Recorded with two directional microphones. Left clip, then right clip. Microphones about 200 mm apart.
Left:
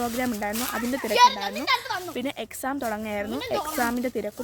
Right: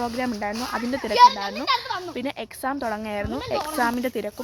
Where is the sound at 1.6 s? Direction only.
70° left (ahead or behind).